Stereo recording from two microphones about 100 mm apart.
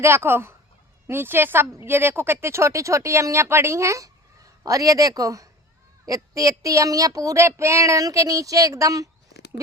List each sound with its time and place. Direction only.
0.0 s speech: 25° right (ahead or behind)